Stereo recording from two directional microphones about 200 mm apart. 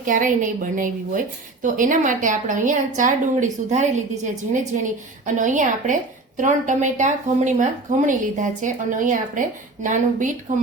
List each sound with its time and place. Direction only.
0.0 s a woman's voice: 40° right (ahead or behind)